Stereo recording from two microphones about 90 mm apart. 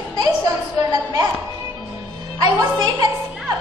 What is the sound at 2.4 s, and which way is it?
Speech, 50° right (ahead or behind).